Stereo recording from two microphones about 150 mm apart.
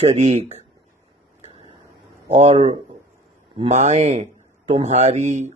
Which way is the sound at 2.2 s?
40° right (ahead or behind).